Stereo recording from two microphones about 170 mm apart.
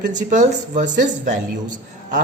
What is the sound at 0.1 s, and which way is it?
Speech, 45° right (ahead or behind).